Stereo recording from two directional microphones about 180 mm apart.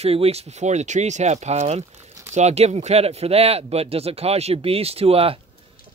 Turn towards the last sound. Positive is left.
turn(degrees=-35)  # may be behind; listen again after turning